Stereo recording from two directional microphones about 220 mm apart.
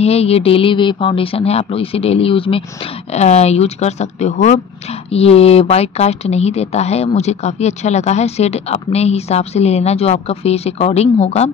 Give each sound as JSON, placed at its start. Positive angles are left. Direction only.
{"t": 0.0, "sound": "speech", "side_deg": 30}